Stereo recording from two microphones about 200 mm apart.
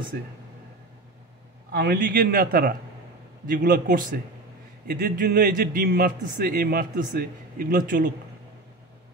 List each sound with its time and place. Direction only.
1.7 s a man's voice: 50° right (ahead or behind)